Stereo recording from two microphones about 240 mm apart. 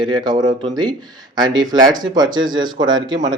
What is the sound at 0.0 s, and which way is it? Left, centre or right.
A man's voice, centre.